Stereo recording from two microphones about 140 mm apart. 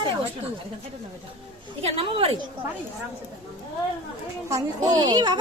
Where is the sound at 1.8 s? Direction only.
40° right (ahead or behind).